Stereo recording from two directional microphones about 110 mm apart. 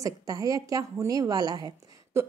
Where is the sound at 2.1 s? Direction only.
25° right (ahead or behind).